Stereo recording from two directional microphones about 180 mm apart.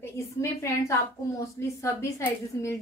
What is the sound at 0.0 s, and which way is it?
Speech, 15° left (ahead or behind).